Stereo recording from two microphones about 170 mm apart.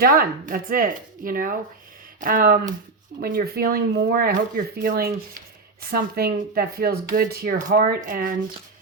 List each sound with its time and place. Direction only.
0.0 s speech: 60° right (ahead or behind)